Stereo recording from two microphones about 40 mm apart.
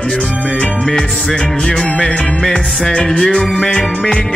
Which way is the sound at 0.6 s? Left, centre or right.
Centre.